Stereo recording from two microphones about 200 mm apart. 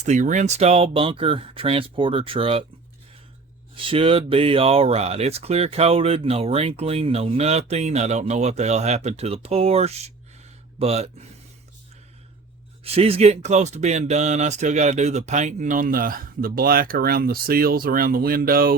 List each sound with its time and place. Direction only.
0.0 s speech: 35° right (ahead or behind)
3.8 s speech: 25° right (ahead or behind)
12.8 s speech: 30° right (ahead or behind); by 18.8 s 45° right (ahead or behind)